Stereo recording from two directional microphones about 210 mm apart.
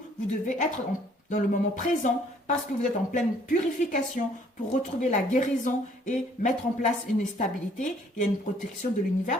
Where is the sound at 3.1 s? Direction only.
35° left (ahead or behind).